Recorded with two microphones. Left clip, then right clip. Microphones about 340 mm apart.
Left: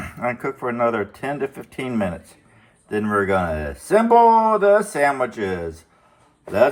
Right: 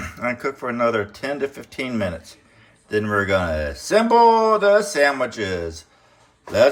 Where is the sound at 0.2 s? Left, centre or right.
Centre.